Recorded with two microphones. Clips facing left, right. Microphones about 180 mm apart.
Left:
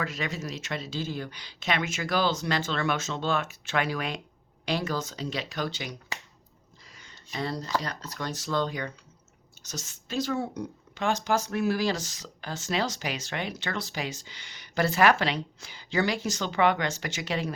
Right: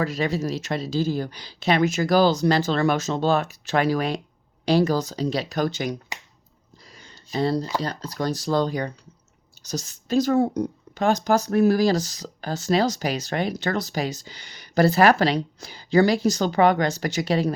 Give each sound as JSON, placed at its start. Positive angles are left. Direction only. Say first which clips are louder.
{"t": 0.0, "sound": "speech", "louder": "right 8 dB", "side_deg": -35}
{"t": 6.9, "sound": "a sound", "louder": "right 9 dB", "side_deg": -35}
{"t": 7.8, "sound": "speech", "louder": "right 8 dB", "side_deg": -30}